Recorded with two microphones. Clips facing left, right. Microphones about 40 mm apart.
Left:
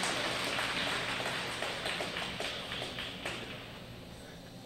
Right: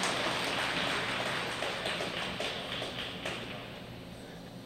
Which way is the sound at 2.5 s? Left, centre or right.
Centre.